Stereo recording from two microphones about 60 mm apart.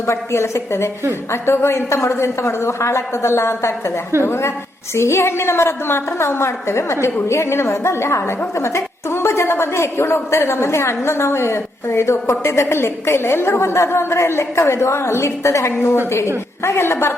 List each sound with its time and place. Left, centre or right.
0.0 s a woman's voice: left
15.7 s a woman's voice: left